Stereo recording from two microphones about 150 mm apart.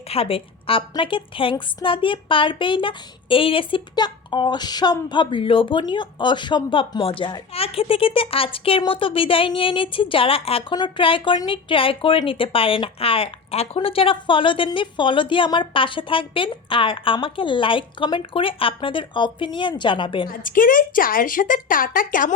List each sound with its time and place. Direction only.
0.1 s a woman's voice: 40° left (ahead or behind)
20.4 s a woman's voice: 65° left (ahead or behind)